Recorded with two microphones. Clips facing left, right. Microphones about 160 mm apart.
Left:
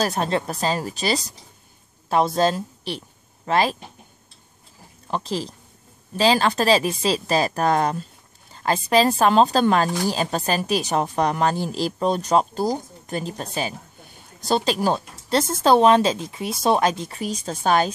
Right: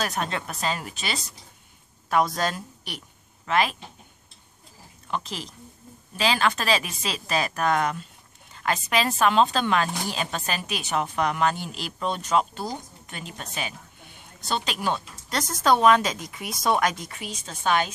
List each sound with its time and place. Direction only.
0.0 s a woman's voice: 35° left (ahead or behind)
5.0 s speech: 35° left (ahead or behind)